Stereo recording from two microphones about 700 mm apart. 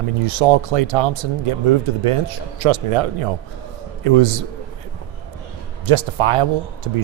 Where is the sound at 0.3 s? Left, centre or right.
Right.